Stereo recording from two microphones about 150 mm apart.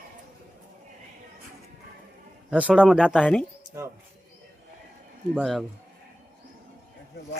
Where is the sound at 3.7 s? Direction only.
20° right (ahead or behind).